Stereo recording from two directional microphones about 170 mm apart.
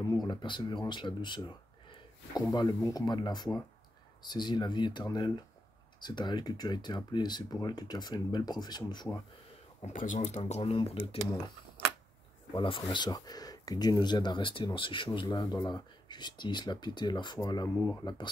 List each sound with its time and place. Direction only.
0.0 s speech: 25° left (ahead or behind)
9.8 s speech: 45° left (ahead or behind)
12.5 s speech: 30° left (ahead or behind)